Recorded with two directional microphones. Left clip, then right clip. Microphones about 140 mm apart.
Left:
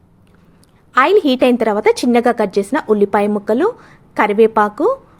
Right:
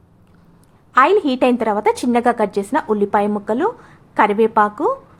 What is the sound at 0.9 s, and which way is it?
A woman's voice, 30° left (ahead or behind).